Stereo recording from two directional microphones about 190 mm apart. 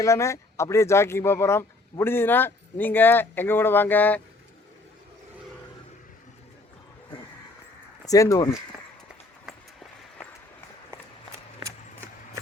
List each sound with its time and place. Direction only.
0.0 s speech: 15° left (ahead or behind)
8.0 s speech: 15° left (ahead or behind)